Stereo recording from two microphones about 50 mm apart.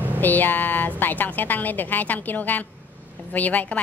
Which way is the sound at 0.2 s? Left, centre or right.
Left.